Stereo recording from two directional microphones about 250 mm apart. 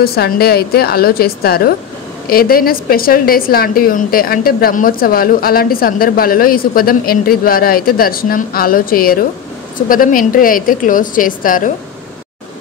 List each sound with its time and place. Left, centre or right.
0.0 s a woman's voice: left